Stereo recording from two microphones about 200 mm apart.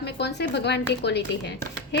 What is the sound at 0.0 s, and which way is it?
Speech, 55° left (ahead or behind).